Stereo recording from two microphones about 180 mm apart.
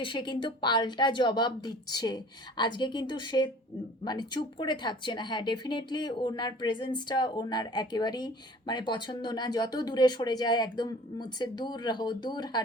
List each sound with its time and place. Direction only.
0.0 s speech: 25° left (ahead or behind)